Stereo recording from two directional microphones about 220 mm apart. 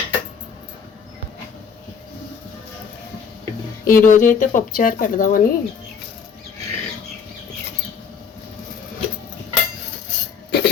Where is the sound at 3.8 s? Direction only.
40° left (ahead or behind).